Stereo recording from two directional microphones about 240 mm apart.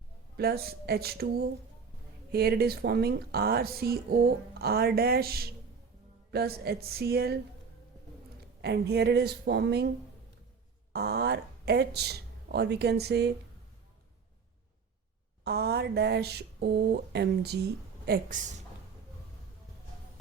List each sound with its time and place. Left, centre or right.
0.3 s speech: right
8.6 s speech: right
10.9 s speech: right
15.4 s speech: right